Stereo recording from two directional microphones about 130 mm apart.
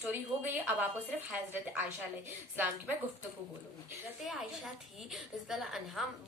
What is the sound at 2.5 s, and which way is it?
Speech, 15° right (ahead or behind).